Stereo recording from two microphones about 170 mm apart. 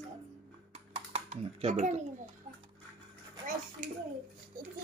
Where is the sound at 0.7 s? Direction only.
40° right (ahead or behind).